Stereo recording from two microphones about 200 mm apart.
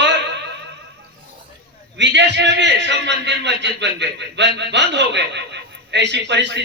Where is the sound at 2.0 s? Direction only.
60° right (ahead or behind).